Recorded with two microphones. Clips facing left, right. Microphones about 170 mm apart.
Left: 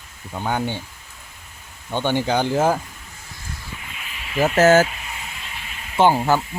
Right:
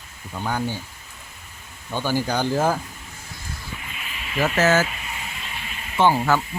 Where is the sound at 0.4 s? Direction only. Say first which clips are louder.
Left 2 dB; 25° left (ahead or behind).